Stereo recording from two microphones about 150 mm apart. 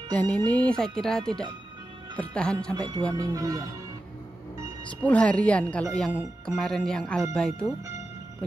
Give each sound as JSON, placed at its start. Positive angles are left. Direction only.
{"t": 0.1, "sound": "speech", "side_deg": 10}
{"t": 2.7, "sound": "speech", "side_deg": -25}
{"t": 5.0, "sound": "speech", "side_deg": 10}